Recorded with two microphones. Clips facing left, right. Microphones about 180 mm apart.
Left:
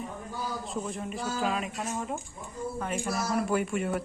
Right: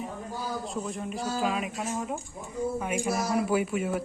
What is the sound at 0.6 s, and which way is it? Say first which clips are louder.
Speech: right 1 dB; centre (ahead or behind).